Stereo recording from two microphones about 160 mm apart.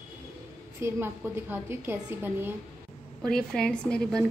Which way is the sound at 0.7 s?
15° right (ahead or behind).